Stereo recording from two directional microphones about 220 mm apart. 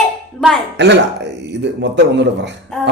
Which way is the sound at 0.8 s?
50° right (ahead or behind).